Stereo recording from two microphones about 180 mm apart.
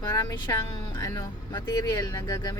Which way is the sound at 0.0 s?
20° left (ahead or behind).